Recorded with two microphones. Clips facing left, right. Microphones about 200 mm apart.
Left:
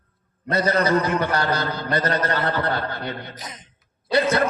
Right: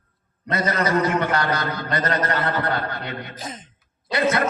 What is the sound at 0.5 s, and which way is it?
A man's voice, 30° left (ahead or behind).